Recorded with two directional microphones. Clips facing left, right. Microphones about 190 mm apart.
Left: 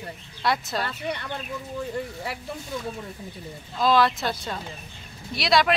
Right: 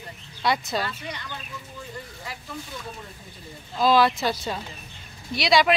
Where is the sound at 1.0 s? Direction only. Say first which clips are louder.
Left 6 dB; 60° left (ahead or behind).